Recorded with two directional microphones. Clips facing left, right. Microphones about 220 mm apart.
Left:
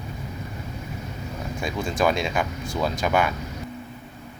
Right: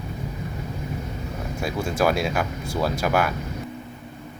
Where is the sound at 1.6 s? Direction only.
5° right (ahead or behind).